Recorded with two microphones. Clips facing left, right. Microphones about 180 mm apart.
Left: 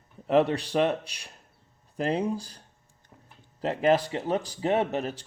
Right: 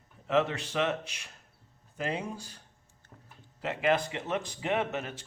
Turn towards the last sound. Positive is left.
turn(degrees=35)  # may be behind; listen again after turning